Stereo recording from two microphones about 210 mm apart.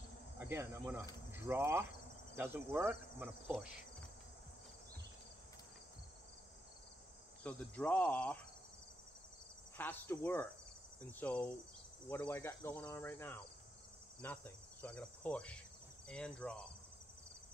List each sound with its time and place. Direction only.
0.4 s cricket: 10° right (ahead or behind)
1.3 s speech: 10° right (ahead or behind)
2.3 s insect: 10° right (ahead or behind)
7.4 s cricket: 5° left (ahead or behind)
9.8 s cricket: 10° left (ahead or behind)
14.2 s insect: 10° left (ahead or behind)